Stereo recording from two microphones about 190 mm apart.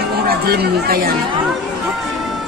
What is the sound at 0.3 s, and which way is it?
Speech, 55° right (ahead or behind).